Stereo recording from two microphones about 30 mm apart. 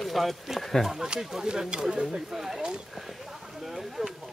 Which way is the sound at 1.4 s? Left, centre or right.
Right.